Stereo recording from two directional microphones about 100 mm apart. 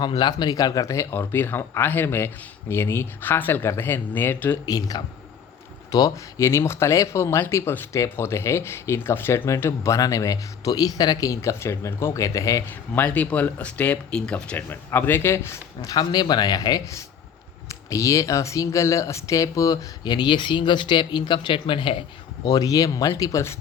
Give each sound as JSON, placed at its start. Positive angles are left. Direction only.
{"t": 0.2, "sound": "speech", "side_deg": 45}
{"t": 4.6, "sound": "speech", "side_deg": 40}
{"t": 12.9, "sound": "speech", "side_deg": 15}
{"t": 15.9, "sound": "speech", "side_deg": 45}
{"t": 22.4, "sound": "speech", "side_deg": 40}